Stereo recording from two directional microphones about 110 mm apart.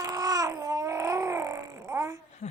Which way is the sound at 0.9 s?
25° right (ahead or behind).